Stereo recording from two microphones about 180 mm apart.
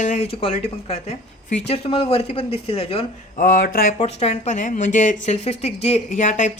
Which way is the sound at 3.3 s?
50° left (ahead or behind).